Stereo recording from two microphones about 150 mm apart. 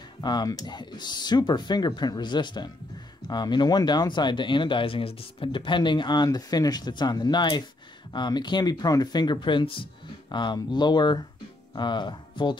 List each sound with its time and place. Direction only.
0.2 s speech: 30° left (ahead or behind)